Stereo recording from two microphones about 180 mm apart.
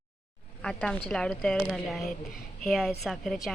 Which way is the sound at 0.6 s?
5° left (ahead or behind).